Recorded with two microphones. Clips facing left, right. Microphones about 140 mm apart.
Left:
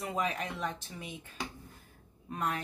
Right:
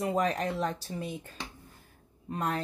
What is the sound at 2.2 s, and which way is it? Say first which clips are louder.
Speech: right 3 dB; 35° right (ahead or behind).